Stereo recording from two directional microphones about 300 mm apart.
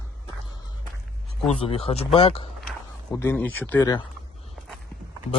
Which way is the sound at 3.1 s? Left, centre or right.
Centre.